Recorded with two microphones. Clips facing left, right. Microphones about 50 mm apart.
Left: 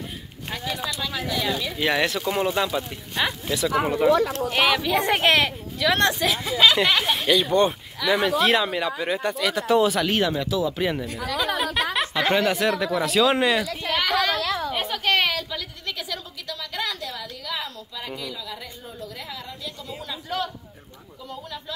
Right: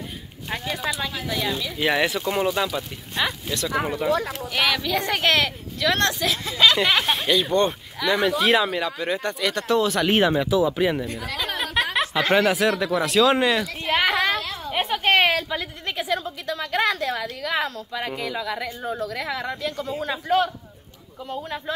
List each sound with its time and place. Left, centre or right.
1.2 s speech: centre
10.0 s speech: right
10.3 s speech: centre
10.8 s speech: centre
13.8 s a sound: right
14.7 s a woman's voice: right
19.9 s a man's voice: right